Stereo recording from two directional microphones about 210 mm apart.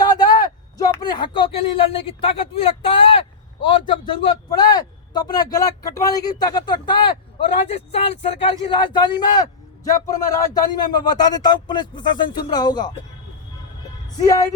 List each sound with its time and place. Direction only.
0.0 s a man's voice: 20° left (ahead or behind)
14.2 s speech: 15° left (ahead or behind)